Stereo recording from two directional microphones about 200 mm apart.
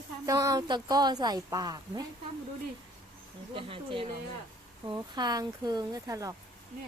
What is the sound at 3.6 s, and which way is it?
A woman's voice, 25° right (ahead or behind).